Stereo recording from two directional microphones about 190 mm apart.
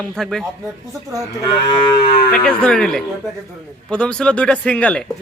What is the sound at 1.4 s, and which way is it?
Moo, 25° left (ahead or behind).